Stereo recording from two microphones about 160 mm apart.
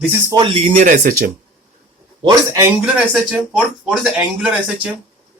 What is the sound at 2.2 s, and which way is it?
Speech, 25° right (ahead or behind).